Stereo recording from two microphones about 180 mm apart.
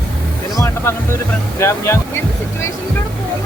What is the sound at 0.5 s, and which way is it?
Speech, 15° left (ahead or behind).